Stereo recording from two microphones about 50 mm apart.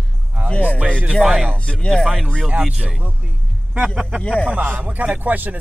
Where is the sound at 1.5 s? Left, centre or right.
Left.